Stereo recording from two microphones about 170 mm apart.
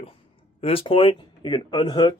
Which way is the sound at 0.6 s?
30° left (ahead or behind).